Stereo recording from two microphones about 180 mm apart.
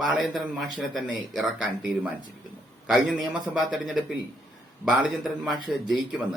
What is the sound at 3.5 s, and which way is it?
A man's voice, centre (ahead or behind).